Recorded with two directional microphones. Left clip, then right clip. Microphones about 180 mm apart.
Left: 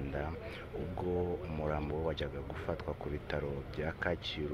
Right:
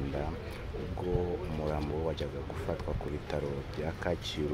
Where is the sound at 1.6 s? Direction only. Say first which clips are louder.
Right 1 dB; 5° right (ahead or behind).